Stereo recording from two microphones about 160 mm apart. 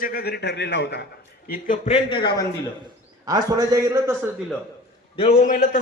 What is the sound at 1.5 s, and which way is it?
Speech, 55° left (ahead or behind).